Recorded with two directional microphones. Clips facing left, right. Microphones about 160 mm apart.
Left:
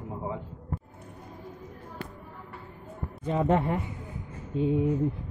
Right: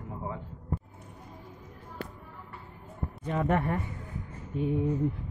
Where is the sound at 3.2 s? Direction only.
20° left (ahead or behind).